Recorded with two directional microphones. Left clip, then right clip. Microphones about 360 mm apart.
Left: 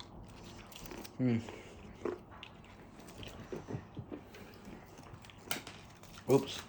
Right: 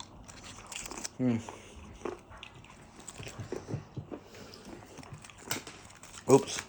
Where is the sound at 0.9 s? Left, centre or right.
Centre.